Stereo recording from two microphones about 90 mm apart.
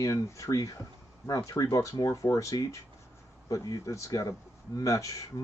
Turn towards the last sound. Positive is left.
turn(degrees=40)  # may be behind; listen again after turning